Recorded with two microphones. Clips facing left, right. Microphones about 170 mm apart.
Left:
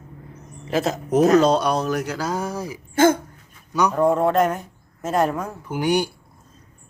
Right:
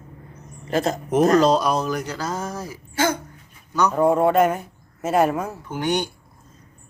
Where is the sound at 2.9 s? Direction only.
50° left (ahead or behind).